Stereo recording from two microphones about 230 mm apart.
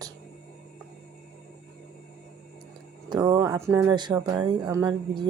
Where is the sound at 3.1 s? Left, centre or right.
Centre.